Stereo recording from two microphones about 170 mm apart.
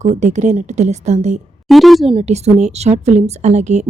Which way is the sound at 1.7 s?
Centre (ahead or behind).